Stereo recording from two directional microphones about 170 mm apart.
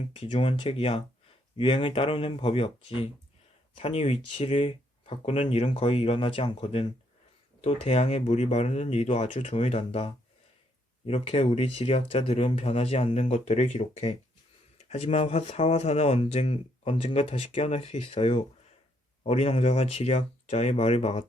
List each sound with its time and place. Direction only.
0.1 s speech: 35° left (ahead or behind)